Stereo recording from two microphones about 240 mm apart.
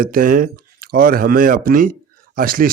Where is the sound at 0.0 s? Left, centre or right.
Right.